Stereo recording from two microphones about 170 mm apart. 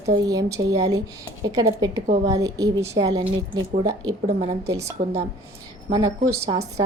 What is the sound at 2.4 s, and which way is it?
Speech, 20° right (ahead or behind).